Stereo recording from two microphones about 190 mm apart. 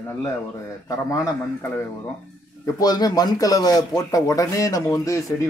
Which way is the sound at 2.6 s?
20° left (ahead or behind).